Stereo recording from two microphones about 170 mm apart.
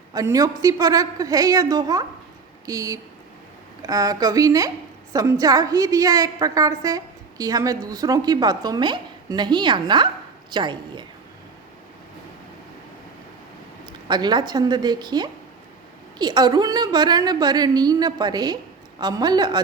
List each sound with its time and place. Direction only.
0.1 s a woman's voice: 20° right (ahead or behind)
14.1 s a woman's voice: 25° right (ahead or behind)